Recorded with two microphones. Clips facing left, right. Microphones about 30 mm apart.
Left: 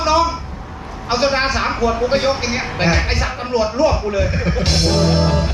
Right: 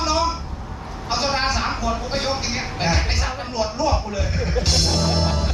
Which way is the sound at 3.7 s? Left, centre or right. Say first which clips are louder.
Left 6 dB; left.